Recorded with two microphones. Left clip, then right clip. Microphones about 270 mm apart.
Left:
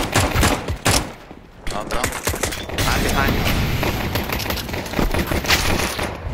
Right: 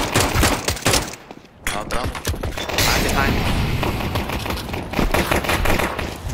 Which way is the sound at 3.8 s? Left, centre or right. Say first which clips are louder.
Left 1 dB; centre.